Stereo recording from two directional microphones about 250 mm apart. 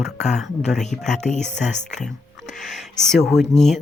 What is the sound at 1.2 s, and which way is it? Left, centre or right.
Speech, left.